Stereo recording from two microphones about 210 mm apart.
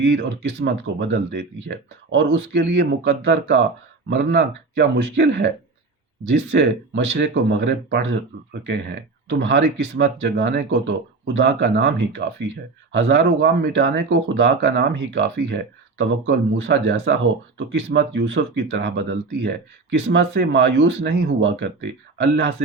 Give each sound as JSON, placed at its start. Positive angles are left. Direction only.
{"t": 0.0, "sound": "speech", "side_deg": -55}
{"t": 9.3, "sound": "speech", "side_deg": -55}